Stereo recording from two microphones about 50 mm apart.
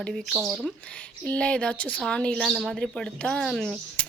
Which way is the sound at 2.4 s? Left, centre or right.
Centre.